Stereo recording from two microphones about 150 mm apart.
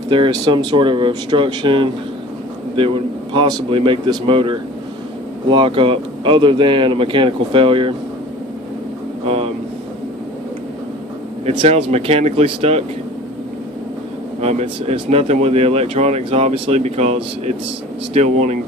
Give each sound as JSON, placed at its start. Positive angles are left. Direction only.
{"t": 0.1, "sound": "speech", "side_deg": -35}
{"t": 9.2, "sound": "speech", "side_deg": -40}
{"t": 11.4, "sound": "speech", "side_deg": -45}
{"t": 14.4, "sound": "speech", "side_deg": -45}